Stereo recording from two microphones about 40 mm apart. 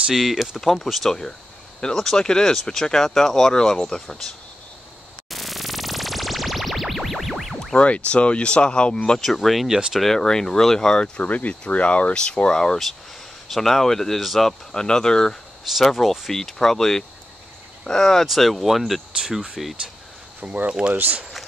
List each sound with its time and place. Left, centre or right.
0.1 s speech: centre
0.6 s speech: centre
1.8 s speech: centre
5.3 s music: centre
7.7 s speech: left
9.2 s speech: centre
11.1 s speech: left
13.5 s speech: centre
14.7 s speech: centre
15.8 s speech: centre
18.2 s speech: centre
19.1 s speech: centre
20.3 s speech: right